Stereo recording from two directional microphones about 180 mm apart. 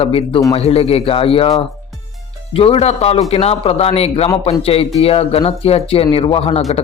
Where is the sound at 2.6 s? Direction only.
35° left (ahead or behind).